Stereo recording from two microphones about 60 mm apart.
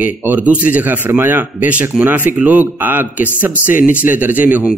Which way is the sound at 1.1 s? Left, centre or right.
Right.